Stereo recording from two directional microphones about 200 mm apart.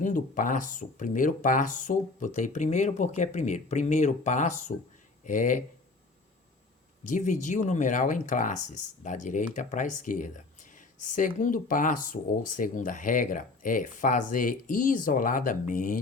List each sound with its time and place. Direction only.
0.0 s speech: 40° left (ahead or behind)
7.1 s speech: 40° left (ahead or behind)